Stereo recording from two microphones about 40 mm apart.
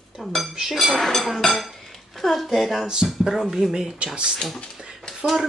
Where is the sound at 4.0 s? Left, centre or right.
Right.